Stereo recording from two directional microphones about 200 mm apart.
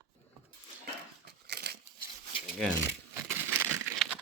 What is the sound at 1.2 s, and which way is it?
Crumpling, 55° right (ahead or behind).